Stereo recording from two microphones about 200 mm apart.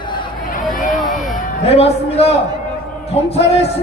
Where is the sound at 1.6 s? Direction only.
30° left (ahead or behind).